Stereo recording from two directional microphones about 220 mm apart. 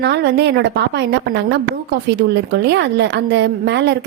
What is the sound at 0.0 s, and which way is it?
A woman's voice, 50° right (ahead or behind).